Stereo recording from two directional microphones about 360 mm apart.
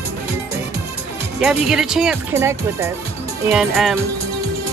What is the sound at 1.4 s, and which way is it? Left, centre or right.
Speech, centre.